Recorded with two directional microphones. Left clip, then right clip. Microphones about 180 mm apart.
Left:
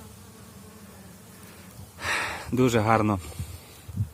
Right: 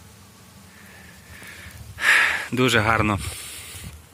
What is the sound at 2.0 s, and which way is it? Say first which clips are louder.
Gasp: right 11 dB; centre (ahead or behind).